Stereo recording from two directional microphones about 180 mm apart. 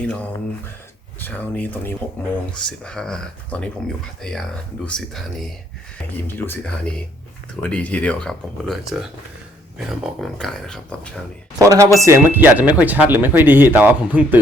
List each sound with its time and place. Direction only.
0.0 s speech: 5° left (ahead or behind)
11.6 s speech: 20° right (ahead or behind)